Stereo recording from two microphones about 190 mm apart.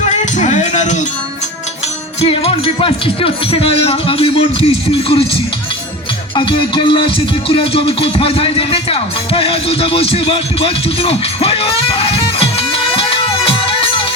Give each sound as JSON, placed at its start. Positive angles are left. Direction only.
{"t": 0.1, "sound": "music", "side_deg": 40}
{"t": 2.2, "sound": "speech", "side_deg": 30}
{"t": 6.3, "sound": "music", "side_deg": 25}